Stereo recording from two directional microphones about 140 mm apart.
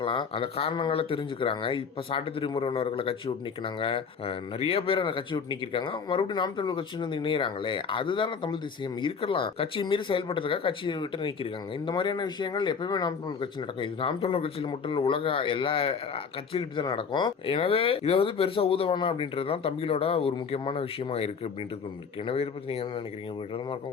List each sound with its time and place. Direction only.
0.0 s speech: 35° left (ahead or behind)